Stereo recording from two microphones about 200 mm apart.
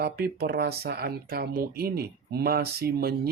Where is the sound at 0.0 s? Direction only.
50° right (ahead or behind).